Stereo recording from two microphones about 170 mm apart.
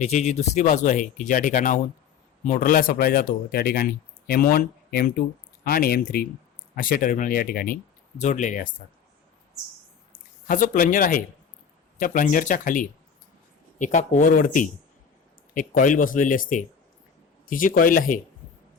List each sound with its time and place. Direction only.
0.0 s speech: 40° left (ahead or behind); by 7.8 s 60° left (ahead or behind)
8.2 s speech: 45° left (ahead or behind)
10.1 s speech: 50° left (ahead or behind)